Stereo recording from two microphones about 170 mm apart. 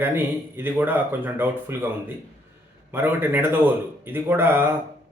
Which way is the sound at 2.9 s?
10° right (ahead or behind).